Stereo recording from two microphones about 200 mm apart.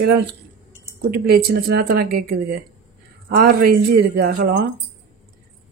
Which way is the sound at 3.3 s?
50° right (ahead or behind).